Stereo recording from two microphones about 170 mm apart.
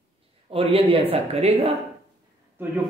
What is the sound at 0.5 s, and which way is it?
Speech, 35° right (ahead or behind).